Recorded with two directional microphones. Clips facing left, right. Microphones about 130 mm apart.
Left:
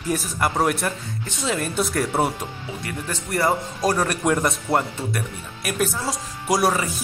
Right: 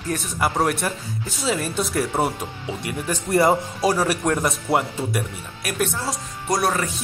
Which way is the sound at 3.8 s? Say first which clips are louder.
Even; 5° right (ahead or behind).